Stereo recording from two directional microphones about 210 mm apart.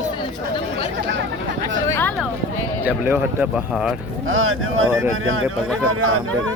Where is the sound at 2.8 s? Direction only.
10° right (ahead or behind).